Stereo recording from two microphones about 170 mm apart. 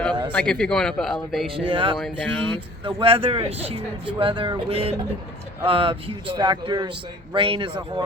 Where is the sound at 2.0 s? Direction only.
Centre (ahead or behind).